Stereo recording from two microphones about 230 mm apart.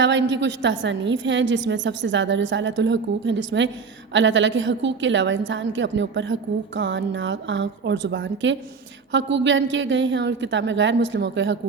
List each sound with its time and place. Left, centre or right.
0.0 s a woman's voice: right